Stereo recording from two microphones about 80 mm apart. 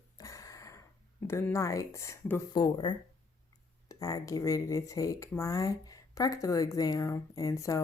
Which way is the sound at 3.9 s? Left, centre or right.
Left.